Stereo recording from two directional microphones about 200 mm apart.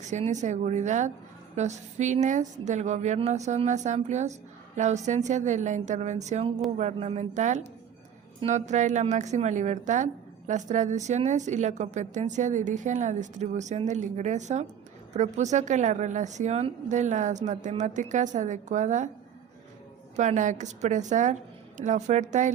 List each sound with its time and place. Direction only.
0.0 s a woman's voice: 35° right (ahead or behind)
20.1 s a woman's voice: 40° right (ahead or behind)